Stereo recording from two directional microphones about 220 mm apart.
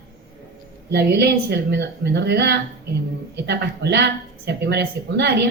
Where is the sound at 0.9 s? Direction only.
50° right (ahead or behind).